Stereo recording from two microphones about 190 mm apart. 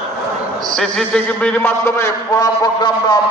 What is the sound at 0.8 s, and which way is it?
A man's voice, 5° left (ahead or behind).